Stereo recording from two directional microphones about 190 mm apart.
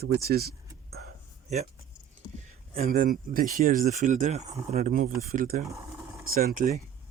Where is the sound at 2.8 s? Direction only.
45° right (ahead or behind).